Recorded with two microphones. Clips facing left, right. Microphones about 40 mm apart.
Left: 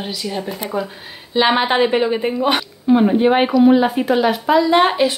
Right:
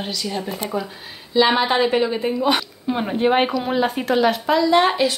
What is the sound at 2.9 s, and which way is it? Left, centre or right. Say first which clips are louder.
A woman's voice: left 6 dB; centre.